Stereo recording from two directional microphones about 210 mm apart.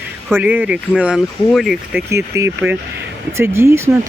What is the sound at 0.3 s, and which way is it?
Speech, 10° right (ahead or behind).